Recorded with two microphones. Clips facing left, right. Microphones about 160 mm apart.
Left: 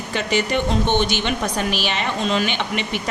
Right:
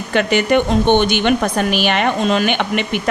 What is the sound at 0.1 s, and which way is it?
A woman's voice, 60° right (ahead or behind).